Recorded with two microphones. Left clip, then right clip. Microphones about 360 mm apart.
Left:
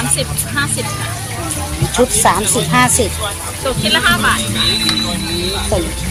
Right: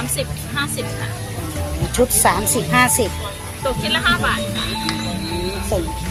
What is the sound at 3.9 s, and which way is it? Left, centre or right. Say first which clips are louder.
Speech: left 5 dB; right.